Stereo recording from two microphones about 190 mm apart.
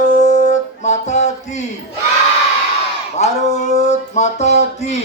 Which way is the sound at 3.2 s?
35° left (ahead or behind).